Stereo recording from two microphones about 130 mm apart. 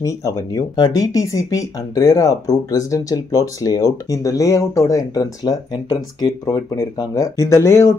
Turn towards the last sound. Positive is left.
turn(degrees=20)  # may be behind; listen again after turning